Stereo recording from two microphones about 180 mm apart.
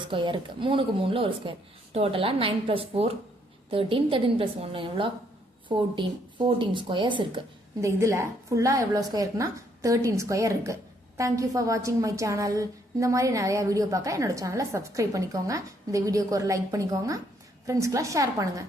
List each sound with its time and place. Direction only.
0.0 s speech: 25° right (ahead or behind)
7.9 s a woman's voice: 15° right (ahead or behind)